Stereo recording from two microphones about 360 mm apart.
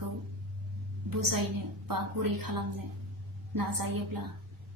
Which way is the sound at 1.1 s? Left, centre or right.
Right.